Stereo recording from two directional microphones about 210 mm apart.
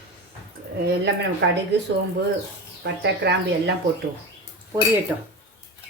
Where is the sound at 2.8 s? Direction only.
55° right (ahead or behind).